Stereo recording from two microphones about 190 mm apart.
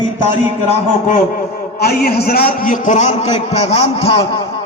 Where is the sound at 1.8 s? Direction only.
55° left (ahead or behind).